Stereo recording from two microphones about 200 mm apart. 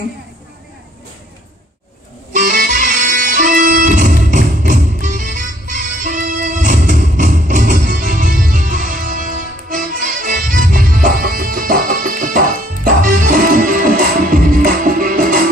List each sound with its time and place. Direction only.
2.3 s music: 45° right (ahead or behind)